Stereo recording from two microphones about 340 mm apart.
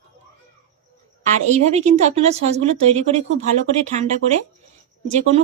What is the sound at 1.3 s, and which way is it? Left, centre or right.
Speech, centre.